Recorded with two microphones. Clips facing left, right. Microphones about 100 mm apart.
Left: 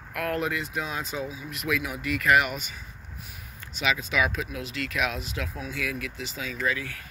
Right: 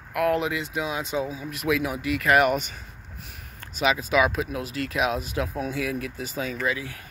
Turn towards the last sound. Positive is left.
turn(degrees=-25)  # may be behind; listen again after turning